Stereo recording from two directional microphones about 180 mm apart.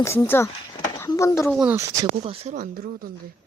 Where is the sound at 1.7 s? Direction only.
15° right (ahead or behind).